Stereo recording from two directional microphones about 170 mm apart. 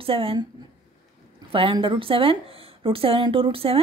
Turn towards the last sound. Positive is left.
turn(degrees=-35)  # may be behind; listen again after turning